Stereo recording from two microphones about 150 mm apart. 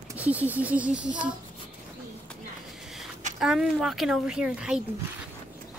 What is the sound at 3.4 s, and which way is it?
Speech, 5° right (ahead or behind).